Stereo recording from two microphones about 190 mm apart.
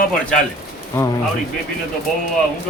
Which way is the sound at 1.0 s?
10° left (ahead or behind).